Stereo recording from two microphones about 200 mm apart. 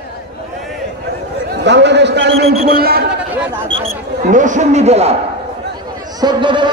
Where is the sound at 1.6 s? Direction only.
60° right (ahead or behind).